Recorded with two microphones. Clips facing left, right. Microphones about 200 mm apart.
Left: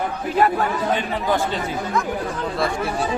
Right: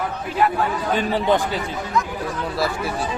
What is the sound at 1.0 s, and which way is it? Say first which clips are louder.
Speech: right 3 dB; 35° right (ahead or behind).